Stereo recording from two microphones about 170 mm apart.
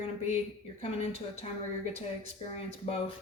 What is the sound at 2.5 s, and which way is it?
Speech, 35° left (ahead or behind).